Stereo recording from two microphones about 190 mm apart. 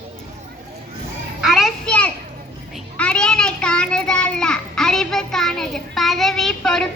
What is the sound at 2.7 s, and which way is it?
Child singing, 5° left (ahead or behind).